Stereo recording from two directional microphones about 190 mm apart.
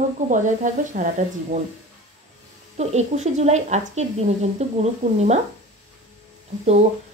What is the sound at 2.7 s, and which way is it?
A woman's voice, 35° right (ahead or behind).